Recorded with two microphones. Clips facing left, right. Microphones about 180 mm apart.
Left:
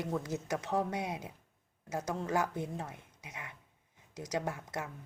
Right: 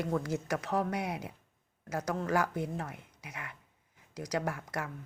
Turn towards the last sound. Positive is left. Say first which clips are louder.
# right 2 dB
turn(degrees=20)  # may be behind; listen again after turning